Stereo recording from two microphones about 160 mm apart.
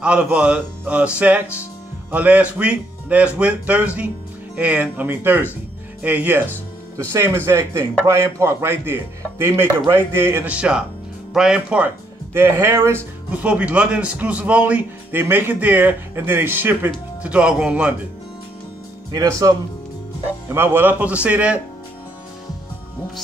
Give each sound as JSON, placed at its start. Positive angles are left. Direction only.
{"t": 0.0, "sound": "speech", "side_deg": -5}
{"t": 19.1, "sound": "speech", "side_deg": -20}